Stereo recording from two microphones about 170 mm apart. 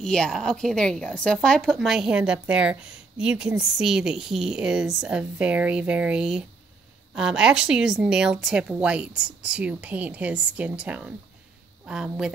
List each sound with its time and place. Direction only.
0.0 s a woman's voice: 5° left (ahead or behind)